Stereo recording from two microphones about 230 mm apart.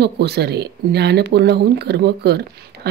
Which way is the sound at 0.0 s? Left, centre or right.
Right.